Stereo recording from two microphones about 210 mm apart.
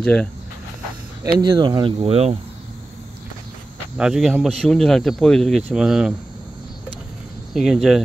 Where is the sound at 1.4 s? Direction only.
20° right (ahead or behind).